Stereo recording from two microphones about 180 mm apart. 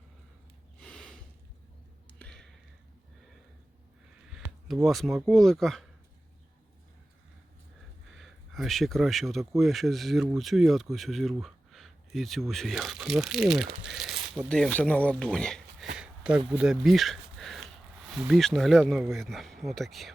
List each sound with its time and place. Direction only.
0.8 s snort: 5° left (ahead or behind)
2.1 s a sound: 5° left (ahead or behind)
4.3 s speech: centre (ahead or behind)
8.1 s speech: centre (ahead or behind)
16.0 s a sound: 5° right (ahead or behind)
16.5 s speech: 5° right (ahead or behind)